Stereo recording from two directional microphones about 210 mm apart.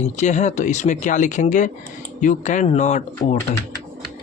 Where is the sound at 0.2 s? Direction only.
35° left (ahead or behind).